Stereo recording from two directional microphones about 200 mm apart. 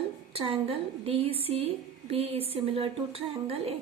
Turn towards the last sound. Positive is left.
turn(degrees=-30)  # may be behind; listen again after turning